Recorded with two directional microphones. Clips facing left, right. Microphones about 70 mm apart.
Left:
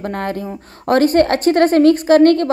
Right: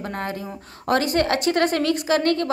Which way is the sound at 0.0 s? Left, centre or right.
Left.